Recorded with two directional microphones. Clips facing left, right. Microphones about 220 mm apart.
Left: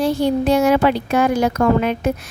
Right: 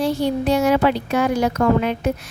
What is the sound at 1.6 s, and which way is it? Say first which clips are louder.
Speech: left 1 dB; 90° left.